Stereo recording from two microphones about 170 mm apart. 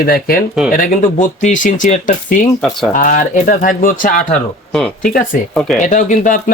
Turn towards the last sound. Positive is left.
turn(degrees=50)  # may be behind; listen again after turning